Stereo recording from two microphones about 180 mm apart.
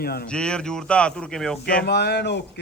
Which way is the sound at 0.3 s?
5° left (ahead or behind).